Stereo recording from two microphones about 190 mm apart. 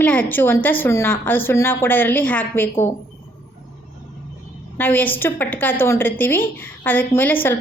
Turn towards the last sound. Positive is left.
turn(degrees=10)  # may be behind; listen again after turning